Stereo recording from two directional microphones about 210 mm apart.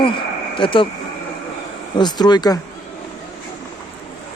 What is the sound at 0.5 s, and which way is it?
Speech, 25° left (ahead or behind).